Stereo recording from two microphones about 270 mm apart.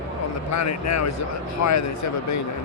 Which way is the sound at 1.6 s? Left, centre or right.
Left.